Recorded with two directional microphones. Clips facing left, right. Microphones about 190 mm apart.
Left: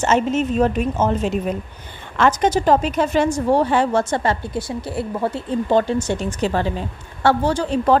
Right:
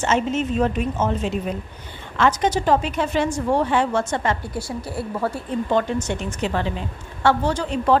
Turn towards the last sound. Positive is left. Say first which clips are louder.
# left 3 dB
turn(degrees=35)  # may be behind; listen again after turning